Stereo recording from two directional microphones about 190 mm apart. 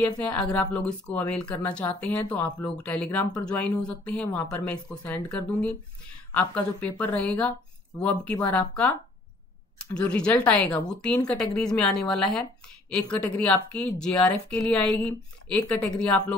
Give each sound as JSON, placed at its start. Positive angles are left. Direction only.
{"t": 0.1, "sound": "speech", "side_deg": 20}
{"t": 0.7, "sound": "speech", "side_deg": 5}